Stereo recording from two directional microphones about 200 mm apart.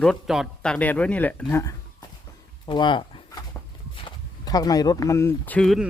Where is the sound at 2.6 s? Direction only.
20° left (ahead or behind).